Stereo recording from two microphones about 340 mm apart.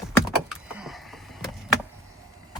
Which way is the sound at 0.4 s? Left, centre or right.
Centre.